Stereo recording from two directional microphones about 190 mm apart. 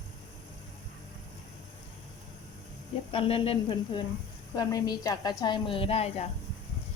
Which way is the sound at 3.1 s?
30° left (ahead or behind).